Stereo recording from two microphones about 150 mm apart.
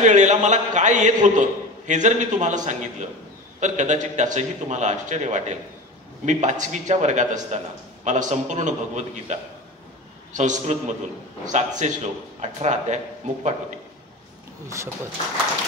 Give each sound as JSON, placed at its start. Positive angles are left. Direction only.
{"t": 0.0, "sound": "a man's voice", "side_deg": -55}